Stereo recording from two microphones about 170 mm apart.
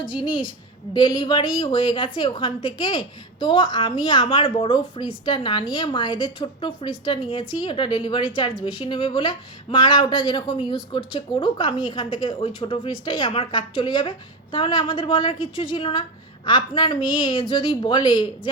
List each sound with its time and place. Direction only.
0.9 s speech: 25° left (ahead or behind)